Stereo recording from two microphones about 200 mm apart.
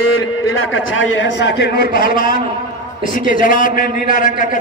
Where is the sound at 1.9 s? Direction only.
45° left (ahead or behind).